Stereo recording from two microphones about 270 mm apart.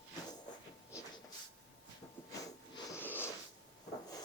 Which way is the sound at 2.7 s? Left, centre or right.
Centre.